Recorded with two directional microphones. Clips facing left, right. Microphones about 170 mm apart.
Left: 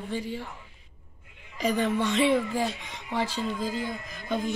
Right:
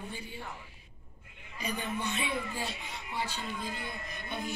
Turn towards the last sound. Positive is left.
turn(degrees=90)